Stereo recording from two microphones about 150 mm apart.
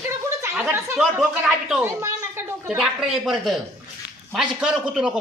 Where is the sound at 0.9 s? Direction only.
Centre (ahead or behind).